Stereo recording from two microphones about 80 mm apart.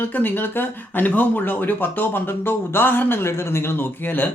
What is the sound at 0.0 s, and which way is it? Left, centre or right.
Speech, left.